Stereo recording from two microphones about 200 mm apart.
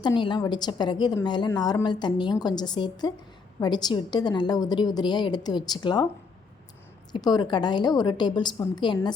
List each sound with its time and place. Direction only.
0.0 s a woman's voice: 25° left (ahead or behind)
7.1 s a woman's voice: 20° left (ahead or behind)